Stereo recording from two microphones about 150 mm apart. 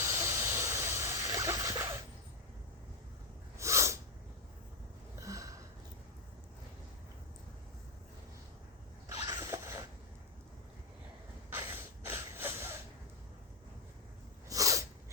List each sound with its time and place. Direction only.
0.0 s hiss: 20° right (ahead or behind)
3.6 s sneeze: 20° right (ahead or behind)
5.2 s a sound: 20° right (ahead or behind)
9.2 s a sound: 20° right (ahead or behind)
11.5 s snort: 15° right (ahead or behind)
14.5 s sneeze: 20° right (ahead or behind)